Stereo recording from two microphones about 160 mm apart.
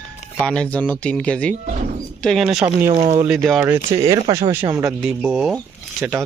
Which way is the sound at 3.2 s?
Centre (ahead or behind).